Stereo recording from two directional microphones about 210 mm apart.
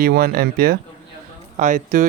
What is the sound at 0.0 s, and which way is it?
Speech, 45° right (ahead or behind).